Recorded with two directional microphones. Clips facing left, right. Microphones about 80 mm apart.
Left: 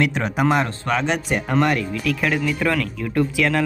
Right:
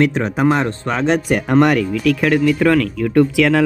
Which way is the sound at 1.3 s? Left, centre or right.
Right.